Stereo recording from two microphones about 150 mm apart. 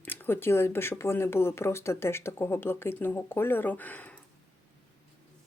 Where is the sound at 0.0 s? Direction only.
15° left (ahead or behind).